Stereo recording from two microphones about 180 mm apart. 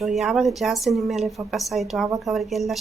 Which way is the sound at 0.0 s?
Centre (ahead or behind).